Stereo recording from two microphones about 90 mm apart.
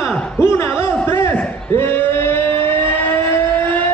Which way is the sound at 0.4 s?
25° left (ahead or behind).